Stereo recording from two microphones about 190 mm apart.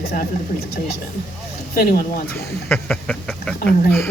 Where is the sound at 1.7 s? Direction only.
50° left (ahead or behind).